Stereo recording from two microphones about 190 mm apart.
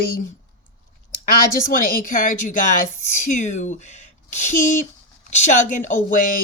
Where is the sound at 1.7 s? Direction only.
45° left (ahead or behind).